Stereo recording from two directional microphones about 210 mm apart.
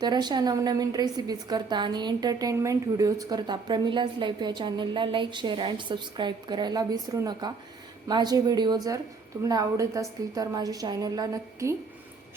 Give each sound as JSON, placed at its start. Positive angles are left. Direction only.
{"t": 0.0, "sound": "a woman's voice", "side_deg": -20}